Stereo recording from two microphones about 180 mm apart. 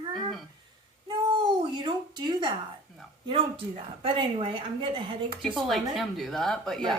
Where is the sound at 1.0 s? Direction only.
25° right (ahead or behind).